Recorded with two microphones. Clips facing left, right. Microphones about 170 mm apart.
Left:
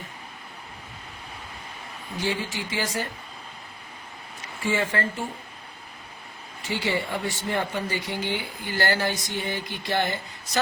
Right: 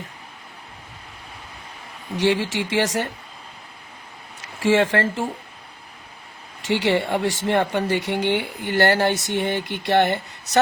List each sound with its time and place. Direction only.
2.1 s speech: 90° right
4.6 s speech: 90° right
6.6 s speech: 90° right; by 10.6 s 70° right (ahead or behind)